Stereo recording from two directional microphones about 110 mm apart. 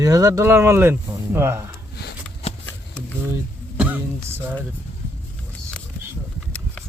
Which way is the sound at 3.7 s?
10° right (ahead or behind).